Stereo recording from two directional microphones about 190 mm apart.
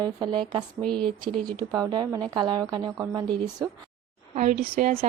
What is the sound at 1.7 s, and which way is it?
A woman's voice, 20° right (ahead or behind).